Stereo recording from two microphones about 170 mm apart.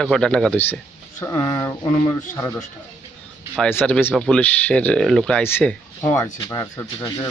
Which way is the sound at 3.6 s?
10° left (ahead or behind).